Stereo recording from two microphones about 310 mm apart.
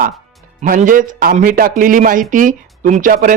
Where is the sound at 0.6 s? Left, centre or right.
Right.